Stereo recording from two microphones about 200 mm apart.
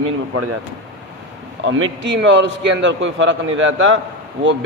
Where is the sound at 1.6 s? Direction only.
70° right (ahead or behind).